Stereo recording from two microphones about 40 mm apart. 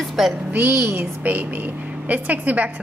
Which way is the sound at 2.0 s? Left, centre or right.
Right.